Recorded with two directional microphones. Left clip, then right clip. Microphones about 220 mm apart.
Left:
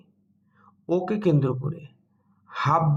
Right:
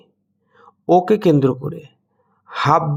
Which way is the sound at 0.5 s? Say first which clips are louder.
Right 12 dB; 50° right (ahead or behind).